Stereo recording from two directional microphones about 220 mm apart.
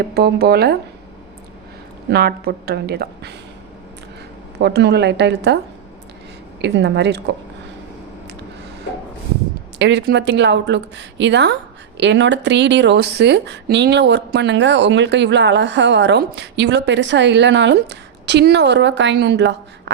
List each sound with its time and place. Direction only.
0.0 s speech: 45° right (ahead or behind)
2.0 s speech: 45° right (ahead or behind)
4.6 s speech: 50° right (ahead or behind)
6.6 s speech: 50° right (ahead or behind)
9.7 s speech: 50° right (ahead or behind)